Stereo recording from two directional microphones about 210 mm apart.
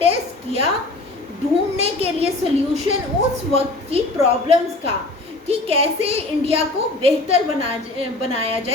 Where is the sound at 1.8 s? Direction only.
30° right (ahead or behind).